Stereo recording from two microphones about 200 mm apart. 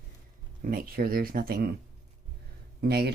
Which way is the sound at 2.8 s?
50° right (ahead or behind).